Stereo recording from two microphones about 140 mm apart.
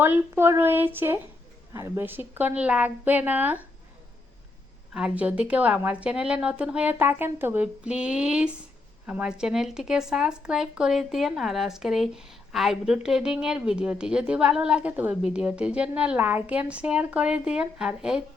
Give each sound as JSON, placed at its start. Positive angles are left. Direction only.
{"t": 0.0, "sound": "a woman's voice", "side_deg": -15}
{"t": 4.9, "sound": "a woman's voice", "side_deg": -10}